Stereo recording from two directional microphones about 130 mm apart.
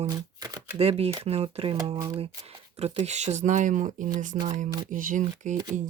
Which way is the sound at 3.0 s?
60° right (ahead or behind).